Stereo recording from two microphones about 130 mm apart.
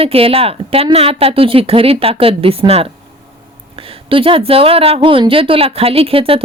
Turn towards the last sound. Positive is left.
turn(degrees=-45)  # may be behind; listen again after turning